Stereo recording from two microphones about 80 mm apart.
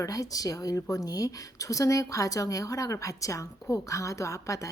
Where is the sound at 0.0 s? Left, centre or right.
Left.